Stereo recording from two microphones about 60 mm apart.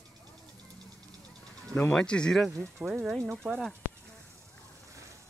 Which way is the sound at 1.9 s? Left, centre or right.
Centre.